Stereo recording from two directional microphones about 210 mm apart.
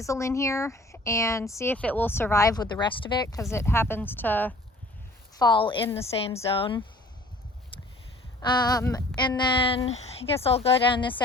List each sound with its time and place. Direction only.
0.0 s speech: 15° left (ahead or behind)
5.4 s speech: 20° left (ahead or behind)
8.4 s speech: 20° left (ahead or behind)